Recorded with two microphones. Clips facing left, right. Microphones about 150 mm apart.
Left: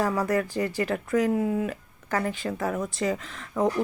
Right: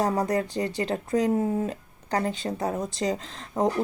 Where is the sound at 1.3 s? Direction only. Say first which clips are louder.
Even; 35° right (ahead or behind).